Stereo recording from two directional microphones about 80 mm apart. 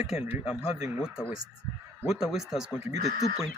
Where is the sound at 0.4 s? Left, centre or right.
Centre.